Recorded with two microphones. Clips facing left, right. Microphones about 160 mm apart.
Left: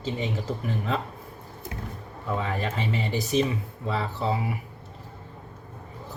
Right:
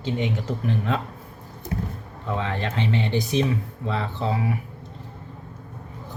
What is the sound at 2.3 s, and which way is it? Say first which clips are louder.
Speech: right 2 dB; 5° left (ahead or behind).